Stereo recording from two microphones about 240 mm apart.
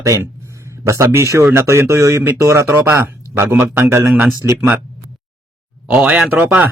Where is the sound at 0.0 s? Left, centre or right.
Centre.